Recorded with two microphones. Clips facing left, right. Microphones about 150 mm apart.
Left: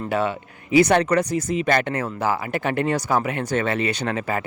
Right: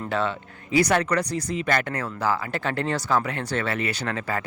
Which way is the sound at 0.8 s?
25° left (ahead or behind).